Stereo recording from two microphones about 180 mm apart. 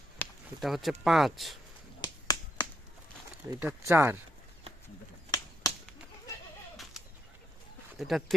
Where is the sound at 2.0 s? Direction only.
25° left (ahead or behind).